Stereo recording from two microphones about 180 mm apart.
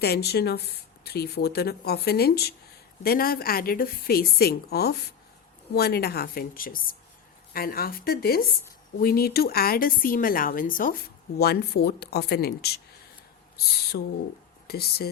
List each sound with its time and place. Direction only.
0.0 s speech: 65° left (ahead or behind)
13.9 s speech: 50° left (ahead or behind)